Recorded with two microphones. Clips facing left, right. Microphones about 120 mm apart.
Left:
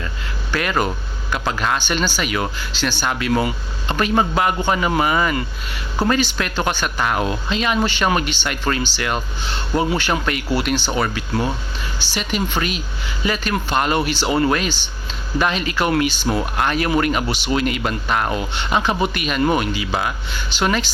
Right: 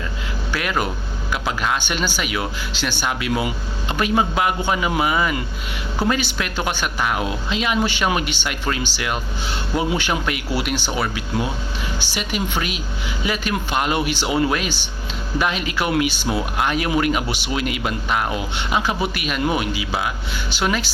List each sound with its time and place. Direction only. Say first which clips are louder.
0.5 s speech: left 3 dB; 5° right (ahead or behind)